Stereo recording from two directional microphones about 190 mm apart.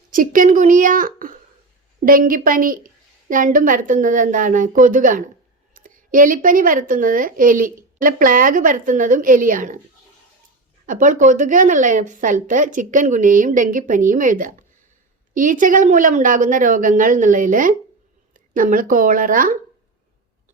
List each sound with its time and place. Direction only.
0.1 s speech: 45° right (ahead or behind)
10.8 s speech: 45° right (ahead or behind)